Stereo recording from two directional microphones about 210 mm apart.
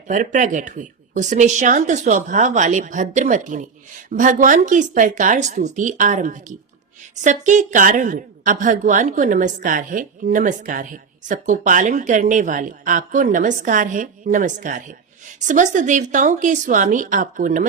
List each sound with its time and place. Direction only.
0.1 s a woman's voice: 40° right (ahead or behind)